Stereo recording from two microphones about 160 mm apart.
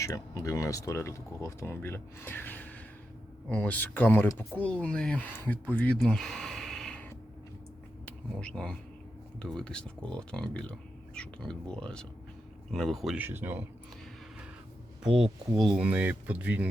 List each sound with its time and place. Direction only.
0.0 s speech: 20° left (ahead or behind); by 13.1 s centre (ahead or behind)
13.1 s speech: 15° right (ahead or behind)
15.0 s speech: 5° right (ahead or behind)